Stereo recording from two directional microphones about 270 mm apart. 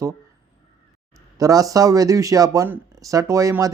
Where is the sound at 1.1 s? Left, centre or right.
Centre.